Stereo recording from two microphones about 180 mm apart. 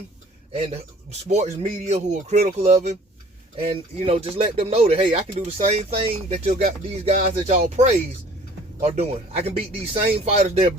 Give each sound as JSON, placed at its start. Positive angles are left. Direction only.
{"t": 1.3, "sound": "speech", "side_deg": -40}